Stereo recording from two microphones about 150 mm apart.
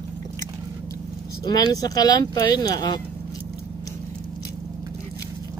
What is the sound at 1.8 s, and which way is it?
Speech, 25° left (ahead or behind).